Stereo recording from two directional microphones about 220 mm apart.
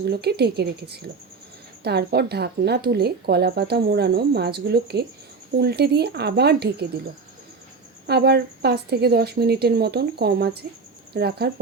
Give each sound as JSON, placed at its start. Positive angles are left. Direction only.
{"t": 0.0, "sound": "a woman's voice", "side_deg": -45}
{"t": 8.0, "sound": "a woman's voice", "side_deg": -45}